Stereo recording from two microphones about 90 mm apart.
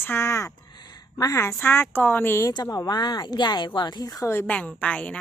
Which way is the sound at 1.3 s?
30° left (ahead or behind).